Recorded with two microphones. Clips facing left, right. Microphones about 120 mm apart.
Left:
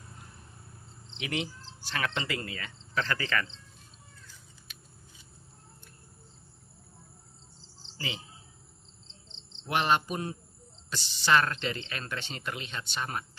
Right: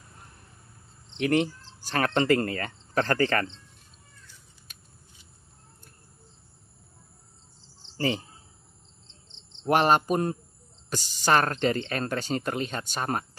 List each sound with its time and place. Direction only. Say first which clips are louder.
1.1 s cricket: right 10 dB; 45° right (ahead or behind)
4.7 s scissors: left 1 dB; 45° right (ahead or behind)
8.0 s speech: right 11 dB; 45° right (ahead or behind)
9.7 s speech: right 6 dB; 45° right (ahead or behind)